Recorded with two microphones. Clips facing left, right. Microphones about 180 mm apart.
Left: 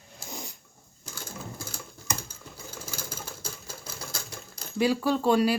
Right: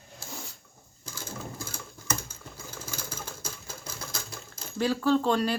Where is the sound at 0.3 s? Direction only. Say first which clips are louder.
Left 2 dB; 15° left (ahead or behind).